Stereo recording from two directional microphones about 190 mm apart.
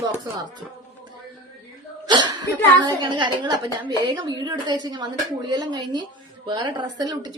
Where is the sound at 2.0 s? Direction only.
20° right (ahead or behind).